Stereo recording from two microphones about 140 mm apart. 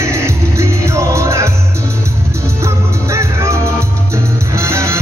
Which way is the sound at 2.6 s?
20° right (ahead or behind).